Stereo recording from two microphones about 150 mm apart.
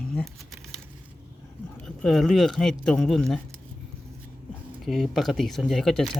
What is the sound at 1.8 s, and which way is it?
Speech, 5° left (ahead or behind).